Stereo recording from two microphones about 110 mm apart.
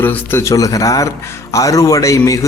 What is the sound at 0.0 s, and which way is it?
A man's voice, 20° left (ahead or behind).